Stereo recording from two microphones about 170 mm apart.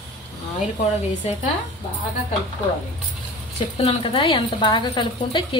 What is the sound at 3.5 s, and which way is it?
Speech, 30° left (ahead or behind).